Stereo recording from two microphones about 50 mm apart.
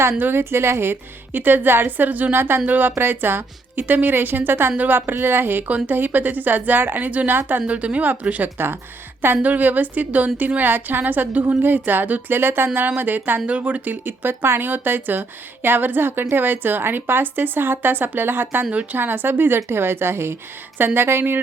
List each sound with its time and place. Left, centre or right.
0.0 s speech: right
2.3 s speech: right
2.6 s a woman's voice: right
5.6 s a woman's voice: right
7.7 s speech: right
8.5 s speech: right
9.4 s a woman's voice: right
13.5 s speech: right
18.6 s speech: right
18.9 s speech: right